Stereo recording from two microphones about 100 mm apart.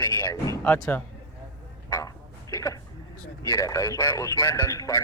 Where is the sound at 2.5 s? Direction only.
35° left (ahead or behind).